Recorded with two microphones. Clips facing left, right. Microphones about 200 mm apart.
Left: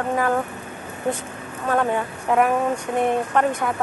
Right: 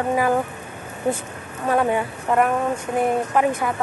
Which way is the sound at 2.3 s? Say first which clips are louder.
Left 1 dB; centre (ahead or behind).